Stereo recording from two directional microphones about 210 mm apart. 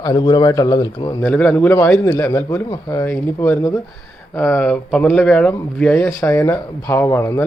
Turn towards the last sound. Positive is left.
turn(degrees=10)  # may be behind; listen again after turning